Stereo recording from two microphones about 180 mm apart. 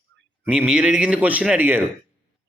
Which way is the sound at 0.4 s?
10° right (ahead or behind).